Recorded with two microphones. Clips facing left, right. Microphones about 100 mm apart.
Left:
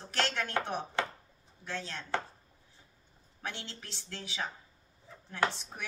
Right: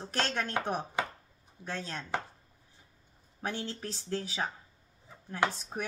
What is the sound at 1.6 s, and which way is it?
Chopping, 40° right (ahead or behind).